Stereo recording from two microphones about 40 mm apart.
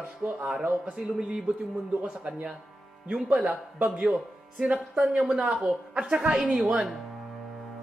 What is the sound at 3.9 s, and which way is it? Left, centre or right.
Speech, centre.